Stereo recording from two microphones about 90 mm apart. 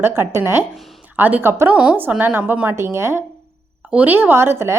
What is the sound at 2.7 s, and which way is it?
A woman's voice, 30° right (ahead or behind).